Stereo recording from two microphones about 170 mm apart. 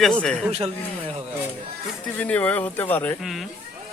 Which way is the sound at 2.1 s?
10° left (ahead or behind).